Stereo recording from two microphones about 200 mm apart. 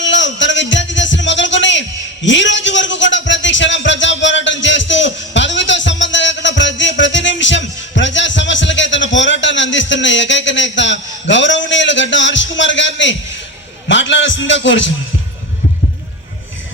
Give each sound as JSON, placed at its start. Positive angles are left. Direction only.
{"t": 0.0, "sound": "music", "side_deg": 65}
{"t": 2.2, "sound": "a sound", "side_deg": 65}
{"t": 13.8, "sound": "a man's voice", "side_deg": 65}